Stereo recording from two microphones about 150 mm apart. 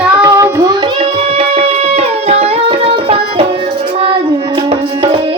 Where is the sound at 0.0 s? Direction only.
15° right (ahead or behind).